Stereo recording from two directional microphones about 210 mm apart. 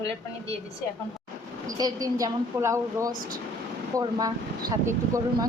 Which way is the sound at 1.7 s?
15° right (ahead or behind).